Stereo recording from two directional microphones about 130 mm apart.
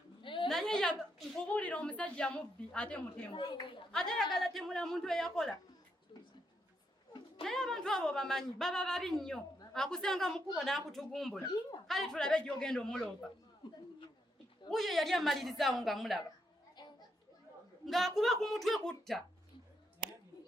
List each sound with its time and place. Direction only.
0.2 s a sound: 40° left (ahead or behind)
0.4 s a sound: 5° left (ahead or behind)
1.5 s a woman's voice: 10° left (ahead or behind)
3.3 s speech: 35° left (ahead or behind)
3.9 s a woman's voice: 5° left (ahead or behind)
7.4 s a woman's voice: 5° left (ahead or behind)
14.7 s a woman's voice: centre (ahead or behind)
17.8 s a woman's voice: centre (ahead or behind)